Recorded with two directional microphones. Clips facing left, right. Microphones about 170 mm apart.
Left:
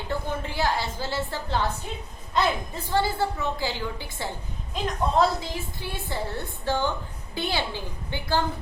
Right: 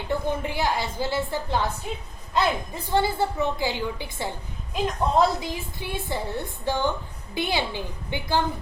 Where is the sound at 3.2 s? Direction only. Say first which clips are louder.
Right 2 dB; 20° right (ahead or behind).